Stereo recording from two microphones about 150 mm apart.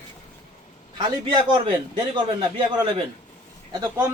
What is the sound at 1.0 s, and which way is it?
Speech, 30° right (ahead or behind).